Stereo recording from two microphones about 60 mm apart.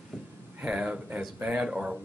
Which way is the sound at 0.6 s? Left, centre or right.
Centre.